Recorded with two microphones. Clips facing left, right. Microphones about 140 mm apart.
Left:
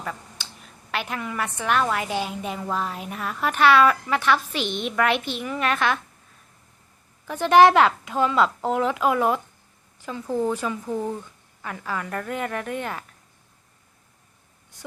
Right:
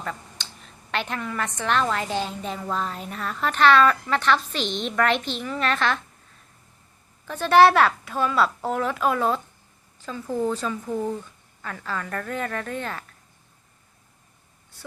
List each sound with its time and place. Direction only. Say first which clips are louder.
0.0 s a woman's voice: even; 5° left (ahead or behind)
7.3 s a woman's voice: left 1 dB; 15° left (ahead or behind)